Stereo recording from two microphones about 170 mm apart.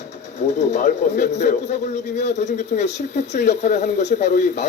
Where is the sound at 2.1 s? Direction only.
40° left (ahead or behind).